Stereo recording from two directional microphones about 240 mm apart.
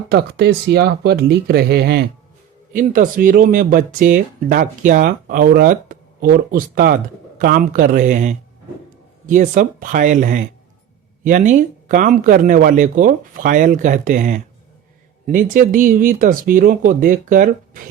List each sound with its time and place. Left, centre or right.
0.1 s speech: right